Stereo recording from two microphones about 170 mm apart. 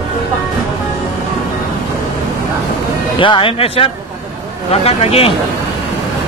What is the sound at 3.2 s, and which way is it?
Speech, 30° left (ahead or behind).